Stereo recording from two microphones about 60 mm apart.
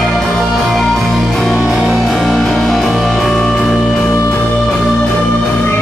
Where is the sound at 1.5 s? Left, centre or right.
Centre.